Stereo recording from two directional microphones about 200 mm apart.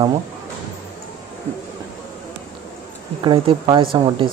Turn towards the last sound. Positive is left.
turn(degrees=-25)  # may be behind; listen again after turning